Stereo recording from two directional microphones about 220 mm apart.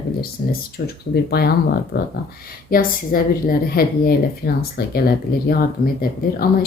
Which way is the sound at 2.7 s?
40° left (ahead or behind).